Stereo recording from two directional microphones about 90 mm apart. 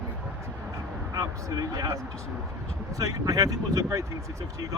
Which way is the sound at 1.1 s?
45° right (ahead or behind).